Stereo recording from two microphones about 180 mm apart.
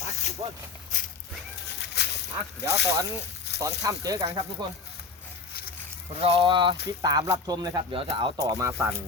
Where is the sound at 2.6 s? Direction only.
70° left (ahead or behind).